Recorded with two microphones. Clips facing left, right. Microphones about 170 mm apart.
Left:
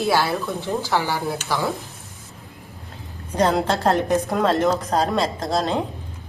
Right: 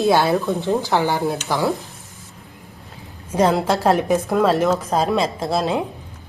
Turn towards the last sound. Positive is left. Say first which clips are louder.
# right 2 dB
turn(degrees=-5)  # may be behind; listen again after turning